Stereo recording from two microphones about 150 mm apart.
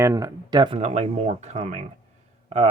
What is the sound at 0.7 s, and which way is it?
Speech, 45° right (ahead or behind).